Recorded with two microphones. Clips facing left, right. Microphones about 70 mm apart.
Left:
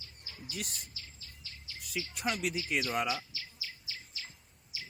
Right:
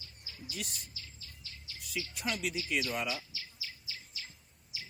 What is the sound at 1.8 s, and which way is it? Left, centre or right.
Speech, left.